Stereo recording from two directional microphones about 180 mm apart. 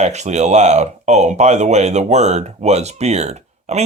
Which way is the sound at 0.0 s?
40° right (ahead or behind).